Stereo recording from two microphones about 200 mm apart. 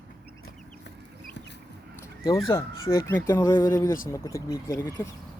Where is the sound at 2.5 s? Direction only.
15° left (ahead or behind).